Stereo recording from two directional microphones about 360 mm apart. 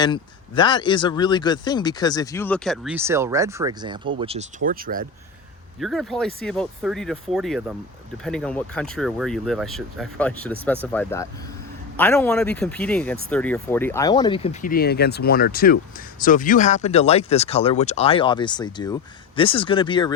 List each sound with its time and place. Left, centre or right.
0.0 s speech: centre; by 5.0 s right
5.8 s speech: centre